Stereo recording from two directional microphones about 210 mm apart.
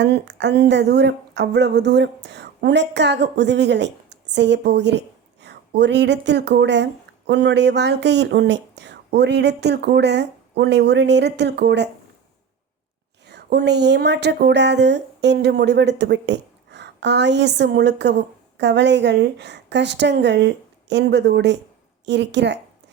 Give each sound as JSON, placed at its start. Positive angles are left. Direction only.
{"t": 0.0, "sound": "speech", "side_deg": -55}
{"t": 13.2, "sound": "speech", "side_deg": -50}